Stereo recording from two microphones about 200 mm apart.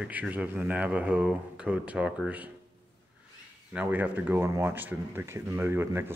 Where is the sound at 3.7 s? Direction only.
10° right (ahead or behind).